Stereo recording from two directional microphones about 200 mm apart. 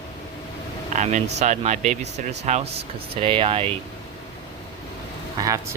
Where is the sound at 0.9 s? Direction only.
35° right (ahead or behind).